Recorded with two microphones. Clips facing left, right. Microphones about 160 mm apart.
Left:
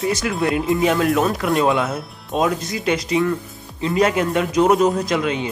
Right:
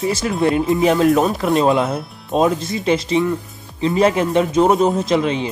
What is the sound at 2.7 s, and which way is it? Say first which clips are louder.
Speech: right 3 dB; 30° right (ahead or behind).